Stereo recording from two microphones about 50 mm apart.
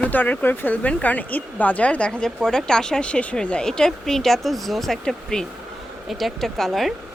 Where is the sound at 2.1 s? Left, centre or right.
Centre.